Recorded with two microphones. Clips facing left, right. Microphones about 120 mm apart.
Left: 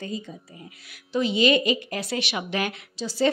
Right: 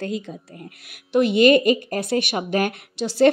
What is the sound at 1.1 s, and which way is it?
A woman's voice, 60° right (ahead or behind).